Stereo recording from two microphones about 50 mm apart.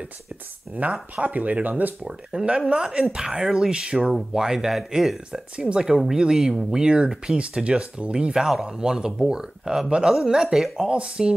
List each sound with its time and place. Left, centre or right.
0.8 s speech: right
2.0 s speech: centre
3.2 s speech: centre